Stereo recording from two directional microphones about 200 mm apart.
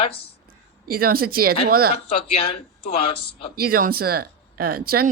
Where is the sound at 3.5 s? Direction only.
45° right (ahead or behind).